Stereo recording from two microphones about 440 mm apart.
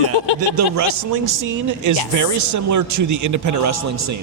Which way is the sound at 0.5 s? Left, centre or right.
Right.